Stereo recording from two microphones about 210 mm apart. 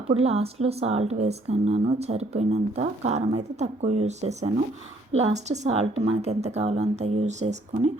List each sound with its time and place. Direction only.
0.1 s speech: 30° right (ahead or behind)